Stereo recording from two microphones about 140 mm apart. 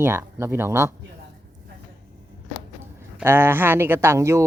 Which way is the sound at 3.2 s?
15° right (ahead or behind).